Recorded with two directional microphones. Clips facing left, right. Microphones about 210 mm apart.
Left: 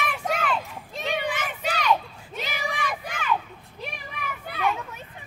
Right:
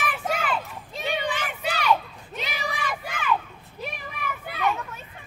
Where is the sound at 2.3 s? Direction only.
10° left (ahead or behind).